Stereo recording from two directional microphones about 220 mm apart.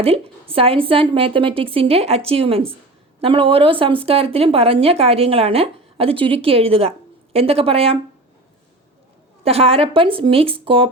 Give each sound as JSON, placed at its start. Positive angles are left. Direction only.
{"t": 0.0, "sound": "speech", "side_deg": -25}
{"t": 9.4, "sound": "speech", "side_deg": -25}